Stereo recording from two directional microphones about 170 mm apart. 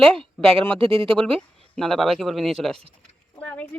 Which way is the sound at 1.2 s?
5° left (ahead or behind).